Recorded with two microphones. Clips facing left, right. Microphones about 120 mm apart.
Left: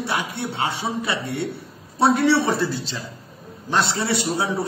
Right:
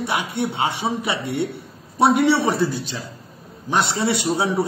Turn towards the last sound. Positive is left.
turn(degrees=-25)  # may be behind; listen again after turning